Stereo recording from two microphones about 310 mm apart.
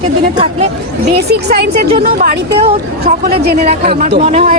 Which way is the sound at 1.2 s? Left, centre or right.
Right.